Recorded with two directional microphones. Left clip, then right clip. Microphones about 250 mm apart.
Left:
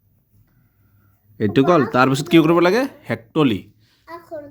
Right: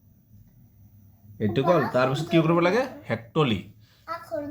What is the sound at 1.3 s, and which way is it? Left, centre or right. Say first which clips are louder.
Speech: left 7 dB; left.